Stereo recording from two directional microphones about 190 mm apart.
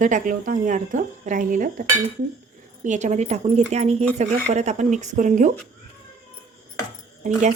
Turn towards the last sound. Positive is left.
turn(degrees=-40)  # may be behind; listen again after turning